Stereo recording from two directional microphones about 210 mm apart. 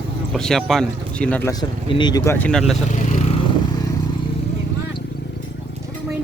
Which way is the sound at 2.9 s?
35° left (ahead or behind).